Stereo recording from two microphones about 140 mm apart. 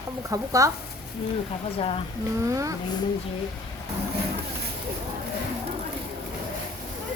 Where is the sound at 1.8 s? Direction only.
40° left (ahead or behind).